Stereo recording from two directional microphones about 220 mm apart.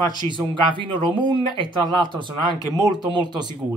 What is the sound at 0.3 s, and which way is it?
Speech, 20° right (ahead or behind).